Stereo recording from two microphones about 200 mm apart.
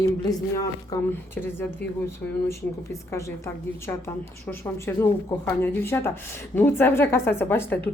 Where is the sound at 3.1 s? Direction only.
15° left (ahead or behind).